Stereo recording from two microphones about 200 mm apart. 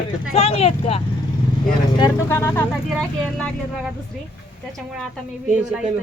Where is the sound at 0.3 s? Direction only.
30° left (ahead or behind).